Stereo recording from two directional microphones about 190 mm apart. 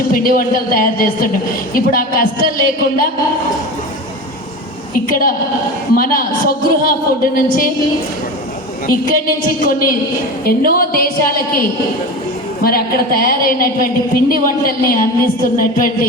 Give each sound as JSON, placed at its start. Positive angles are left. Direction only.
{"t": 0.1, "sound": "a woman's voice", "side_deg": 50}
{"t": 4.9, "sound": "a woman's voice", "side_deg": 50}
{"t": 8.9, "sound": "a woman's voice", "side_deg": 50}
{"t": 12.6, "sound": "a woman's voice", "side_deg": 50}